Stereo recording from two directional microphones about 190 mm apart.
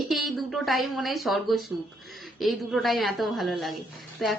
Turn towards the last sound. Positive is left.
turn(degrees=0)  # may be behind; listen again after turning